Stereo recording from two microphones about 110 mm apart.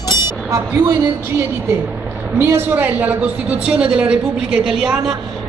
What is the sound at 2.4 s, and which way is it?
A man's voice, 20° right (ahead or behind).